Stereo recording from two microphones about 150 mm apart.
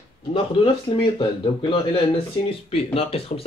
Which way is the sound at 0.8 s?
35° left (ahead or behind).